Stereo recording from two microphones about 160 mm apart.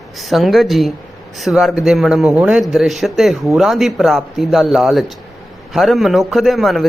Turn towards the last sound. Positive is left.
turn(degrees=0)  # may be behind; listen again after turning